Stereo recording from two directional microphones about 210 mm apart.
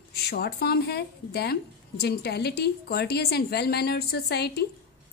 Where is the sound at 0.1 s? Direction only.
50° left (ahead or behind).